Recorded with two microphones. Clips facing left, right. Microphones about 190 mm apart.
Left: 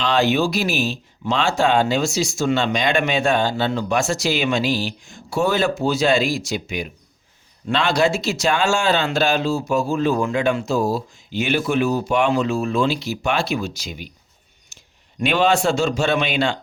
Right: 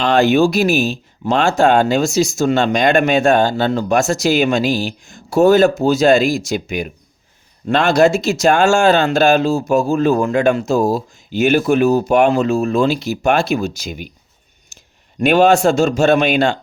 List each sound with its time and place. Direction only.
0.0 s speech: 50° right (ahead or behind)
14.7 s a sound: 45° right (ahead or behind)
15.2 s speech: 45° right (ahead or behind)